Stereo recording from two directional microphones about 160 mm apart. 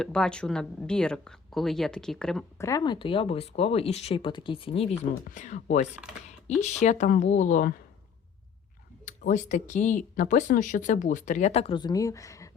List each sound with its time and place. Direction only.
0.0 s speech: 5° left (ahead or behind)
2.6 s speech: 20° left (ahead or behind); by 4.9 s 35° left (ahead or behind)
5.2 s speech: 50° left (ahead or behind)
9.0 s speech: 50° left (ahead or behind); by 12.5 s 20° left (ahead or behind)